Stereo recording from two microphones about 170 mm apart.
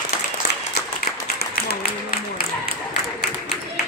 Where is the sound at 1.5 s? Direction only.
60° left (ahead or behind).